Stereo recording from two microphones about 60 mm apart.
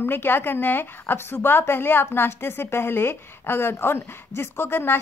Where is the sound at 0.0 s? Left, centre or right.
Left.